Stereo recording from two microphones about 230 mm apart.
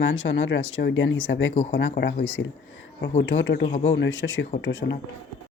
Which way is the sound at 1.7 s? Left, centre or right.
Left.